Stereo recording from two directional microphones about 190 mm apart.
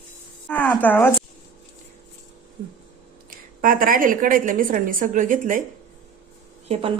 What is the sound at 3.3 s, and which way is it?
A woman's voice, 45° right (ahead or behind).